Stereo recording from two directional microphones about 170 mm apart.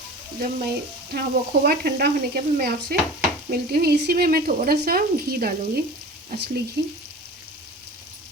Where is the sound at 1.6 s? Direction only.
70° right (ahead or behind).